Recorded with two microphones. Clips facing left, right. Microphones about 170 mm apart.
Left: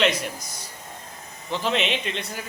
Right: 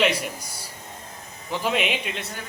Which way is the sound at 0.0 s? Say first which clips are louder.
Even; 10° right (ahead or behind).